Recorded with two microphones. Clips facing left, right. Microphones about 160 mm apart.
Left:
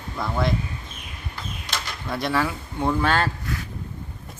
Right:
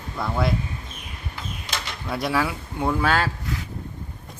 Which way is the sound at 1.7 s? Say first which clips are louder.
Even; 5° right (ahead or behind).